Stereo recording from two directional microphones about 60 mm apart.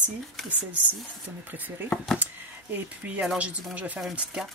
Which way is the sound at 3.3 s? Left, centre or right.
Right.